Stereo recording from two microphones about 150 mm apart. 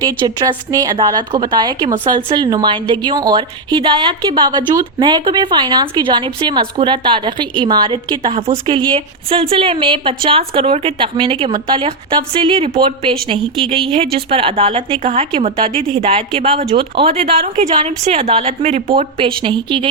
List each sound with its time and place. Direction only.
0.0 s a woman's voice: 25° right (ahead or behind)